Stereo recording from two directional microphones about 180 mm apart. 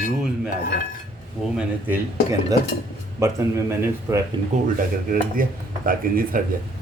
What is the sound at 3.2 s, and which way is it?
Speech, 15° right (ahead or behind).